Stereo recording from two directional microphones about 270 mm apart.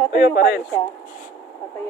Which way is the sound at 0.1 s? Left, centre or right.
Left.